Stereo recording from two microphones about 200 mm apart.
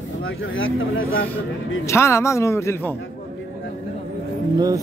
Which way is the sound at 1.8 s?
15° left (ahead or behind).